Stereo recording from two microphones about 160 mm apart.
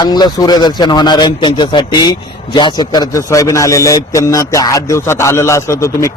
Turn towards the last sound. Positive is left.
turn(degrees=20)  # may be behind; listen again after turning